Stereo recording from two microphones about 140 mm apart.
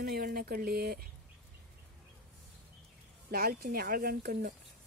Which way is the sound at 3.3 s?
90° right.